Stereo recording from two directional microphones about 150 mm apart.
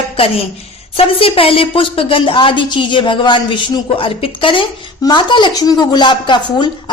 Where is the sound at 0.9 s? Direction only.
40° left (ahead or behind).